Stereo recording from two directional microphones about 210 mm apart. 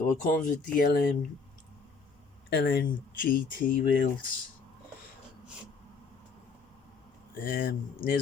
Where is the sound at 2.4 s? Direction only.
50° left (ahead or behind).